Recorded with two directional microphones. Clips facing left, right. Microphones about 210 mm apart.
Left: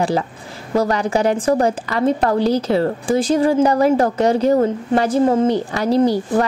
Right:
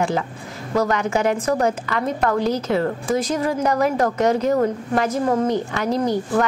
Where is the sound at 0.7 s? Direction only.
35° left (ahead or behind).